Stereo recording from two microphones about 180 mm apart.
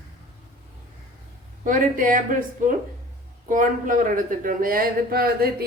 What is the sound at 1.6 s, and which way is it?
A man's voice, 45° right (ahead or behind).